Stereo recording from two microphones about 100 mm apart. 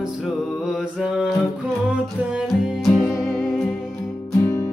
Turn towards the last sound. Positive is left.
turn(degrees=25)  # may be behind; listen again after turning